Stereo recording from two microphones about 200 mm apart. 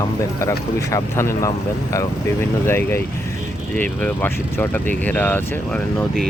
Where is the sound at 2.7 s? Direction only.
10° left (ahead or behind).